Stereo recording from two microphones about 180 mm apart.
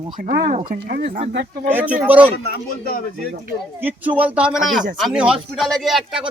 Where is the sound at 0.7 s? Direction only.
55° right (ahead or behind).